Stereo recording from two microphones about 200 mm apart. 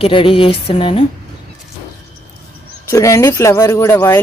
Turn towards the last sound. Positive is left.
turn(degrees=10)  # may be behind; listen again after turning